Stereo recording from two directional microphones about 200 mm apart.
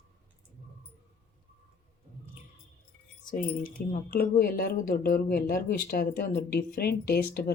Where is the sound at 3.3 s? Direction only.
45° left (ahead or behind).